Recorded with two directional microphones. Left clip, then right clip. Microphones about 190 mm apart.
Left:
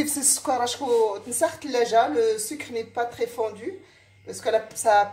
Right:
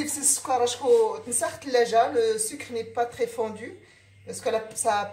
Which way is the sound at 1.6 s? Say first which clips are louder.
Right 1 dB; 35° left (ahead or behind).